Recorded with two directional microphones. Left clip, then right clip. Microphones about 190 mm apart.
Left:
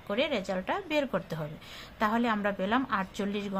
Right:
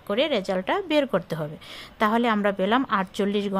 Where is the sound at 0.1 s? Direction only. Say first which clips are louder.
Right 6 dB; 40° right (ahead or behind).